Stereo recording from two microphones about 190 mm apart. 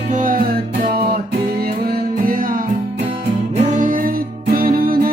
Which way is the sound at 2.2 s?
45° right (ahead or behind).